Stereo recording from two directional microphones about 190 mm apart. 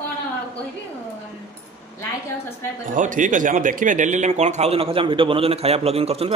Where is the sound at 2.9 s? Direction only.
45° right (ahead or behind).